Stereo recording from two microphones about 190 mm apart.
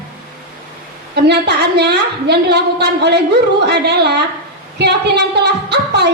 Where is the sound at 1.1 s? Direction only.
60° right (ahead or behind).